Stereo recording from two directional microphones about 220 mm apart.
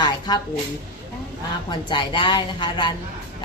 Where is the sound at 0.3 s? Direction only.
20° left (ahead or behind).